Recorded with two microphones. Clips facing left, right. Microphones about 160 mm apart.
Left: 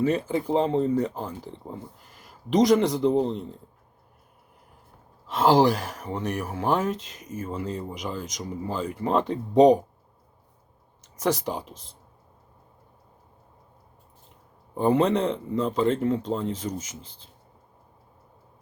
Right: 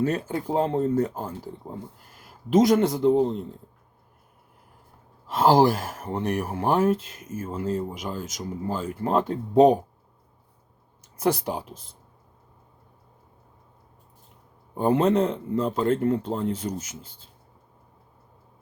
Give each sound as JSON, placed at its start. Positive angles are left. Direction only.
{"t": 0.1, "sound": "speech", "side_deg": -5}
{"t": 5.3, "sound": "speech", "side_deg": -10}
{"t": 5.8, "sound": "speech", "side_deg": -50}
{"t": 6.1, "sound": "speech", "side_deg": -10}
{"t": 6.9, "sound": "speech", "side_deg": -50}
{"t": 7.4, "sound": "speech", "side_deg": -5}
{"t": 11.2, "sound": "speech", "side_deg": -10}
{"t": 14.8, "sound": "speech", "side_deg": -5}